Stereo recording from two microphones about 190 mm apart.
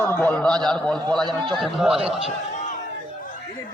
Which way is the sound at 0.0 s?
10° left (ahead or behind).